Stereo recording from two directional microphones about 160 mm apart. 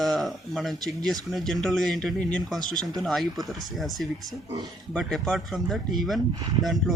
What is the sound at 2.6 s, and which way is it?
Speech, 25° right (ahead or behind).